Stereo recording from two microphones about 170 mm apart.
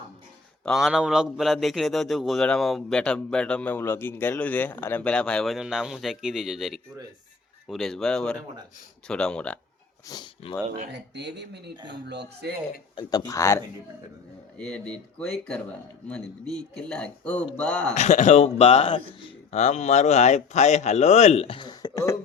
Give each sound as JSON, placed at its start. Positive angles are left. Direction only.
{"t": 0.6, "sound": "a man's voice", "side_deg": 0}
{"t": 10.1, "sound": "speech", "side_deg": 25}
{"t": 10.9, "sound": "speech", "side_deg": -90}
{"t": 13.0, "sound": "speech", "side_deg": 20}
{"t": 14.6, "sound": "a man's voice", "side_deg": 5}
{"t": 17.9, "sound": "speech", "side_deg": 45}